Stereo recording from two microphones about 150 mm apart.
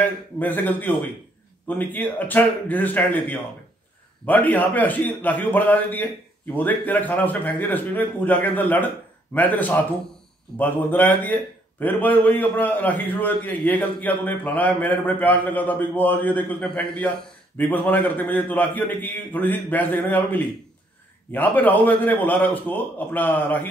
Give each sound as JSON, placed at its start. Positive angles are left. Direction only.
{"t": 0.0, "sound": "a man's voice", "side_deg": 10}